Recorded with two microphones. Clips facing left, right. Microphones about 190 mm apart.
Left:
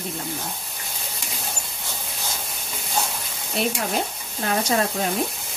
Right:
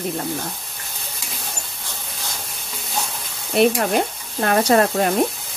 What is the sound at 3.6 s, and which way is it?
Frying, 65° right (ahead or behind).